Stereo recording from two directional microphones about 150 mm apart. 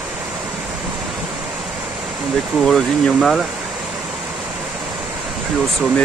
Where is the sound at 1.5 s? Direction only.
5° right (ahead or behind).